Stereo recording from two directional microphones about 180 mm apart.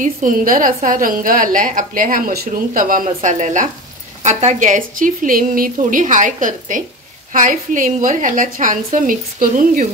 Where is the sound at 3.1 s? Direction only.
40° right (ahead or behind).